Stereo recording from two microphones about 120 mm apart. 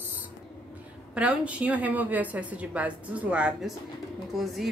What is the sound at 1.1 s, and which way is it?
A woman's voice, 10° right (ahead or behind).